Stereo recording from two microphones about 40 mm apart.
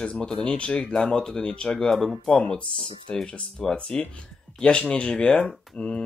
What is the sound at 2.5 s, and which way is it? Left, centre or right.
Speech, left.